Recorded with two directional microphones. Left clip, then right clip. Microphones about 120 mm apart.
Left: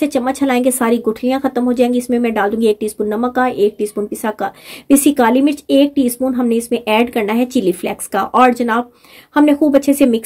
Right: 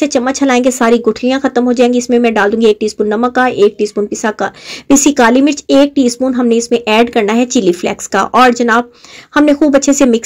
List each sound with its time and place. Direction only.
0.0 s speech: 30° right (ahead or behind)